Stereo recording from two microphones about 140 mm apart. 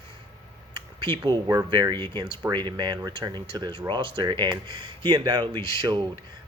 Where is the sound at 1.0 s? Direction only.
30° right (ahead or behind).